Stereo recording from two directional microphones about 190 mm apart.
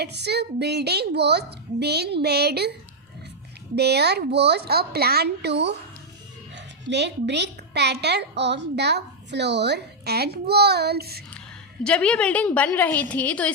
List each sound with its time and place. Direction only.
0.0 s speech: 60° right (ahead or behind)
3.8 s speech: 60° right (ahead or behind)
11.3 s a woman's voice: 5° left (ahead or behind)